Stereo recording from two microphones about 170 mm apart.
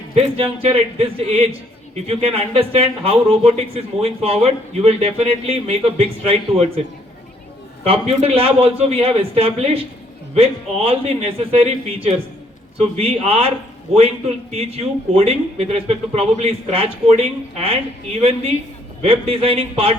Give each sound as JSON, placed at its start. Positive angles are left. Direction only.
{"t": 0.1, "sound": "speech", "side_deg": -35}
{"t": 7.9, "sound": "speech", "side_deg": -35}
{"t": 14.5, "sound": "speech", "side_deg": -35}